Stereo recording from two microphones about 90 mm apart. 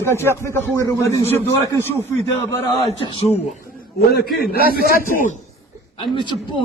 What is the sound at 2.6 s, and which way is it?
Speech, 70° left (ahead or behind).